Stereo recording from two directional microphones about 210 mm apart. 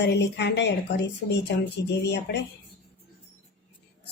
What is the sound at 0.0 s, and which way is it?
Speech, 55° left (ahead or behind).